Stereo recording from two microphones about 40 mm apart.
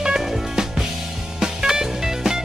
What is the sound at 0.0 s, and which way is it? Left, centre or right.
Music, centre.